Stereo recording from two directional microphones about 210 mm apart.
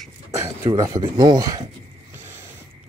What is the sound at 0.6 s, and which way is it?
Speech, 15° right (ahead or behind).